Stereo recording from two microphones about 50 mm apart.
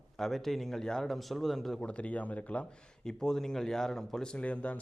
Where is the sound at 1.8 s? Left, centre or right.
Left.